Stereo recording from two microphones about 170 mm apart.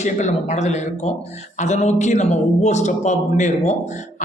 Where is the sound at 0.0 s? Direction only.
45° left (ahead or behind).